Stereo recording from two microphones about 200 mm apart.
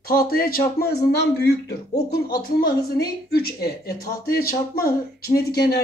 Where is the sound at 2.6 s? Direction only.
50° left (ahead or behind).